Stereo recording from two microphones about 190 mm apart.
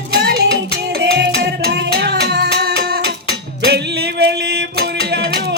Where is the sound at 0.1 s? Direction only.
55° right (ahead or behind).